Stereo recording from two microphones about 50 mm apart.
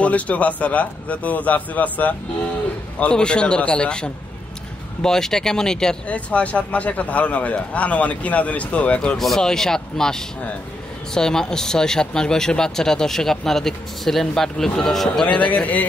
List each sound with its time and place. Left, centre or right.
0.0 s a man's voice: left
3.0 s a man's voice: left
6.0 s a man's voice: left
9.4 s speech: centre
15.2 s speech: left